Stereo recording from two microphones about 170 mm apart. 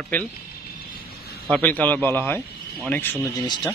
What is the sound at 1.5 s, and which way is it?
Speech, 10° left (ahead or behind).